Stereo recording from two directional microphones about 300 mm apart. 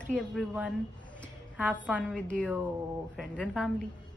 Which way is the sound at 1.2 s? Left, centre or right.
Centre.